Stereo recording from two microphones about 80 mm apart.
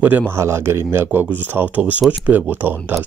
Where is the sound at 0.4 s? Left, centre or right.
Right.